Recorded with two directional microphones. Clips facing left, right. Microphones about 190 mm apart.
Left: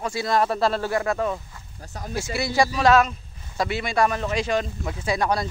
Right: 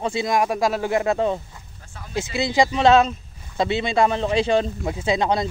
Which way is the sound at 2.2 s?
20° right (ahead or behind).